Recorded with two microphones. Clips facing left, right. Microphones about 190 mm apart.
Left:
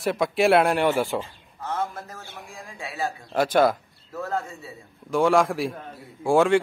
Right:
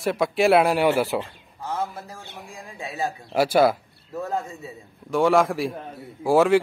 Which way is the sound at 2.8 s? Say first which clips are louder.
Right 1 dB; 20° right (ahead or behind).